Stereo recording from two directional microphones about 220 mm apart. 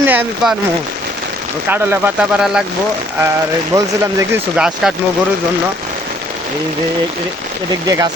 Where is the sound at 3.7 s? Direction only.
15° right (ahead or behind).